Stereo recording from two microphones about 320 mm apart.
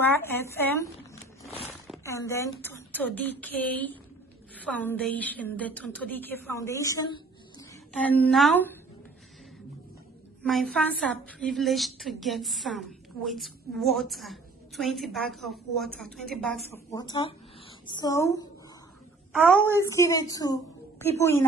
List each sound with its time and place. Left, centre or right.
0.0 s a woman's voice: centre
1.4 s a sound: centre
1.9 s a woman's voice: centre
10.4 s a woman's voice: centre
19.4 s a woman's voice: centre
19.8 s a woman's voice: centre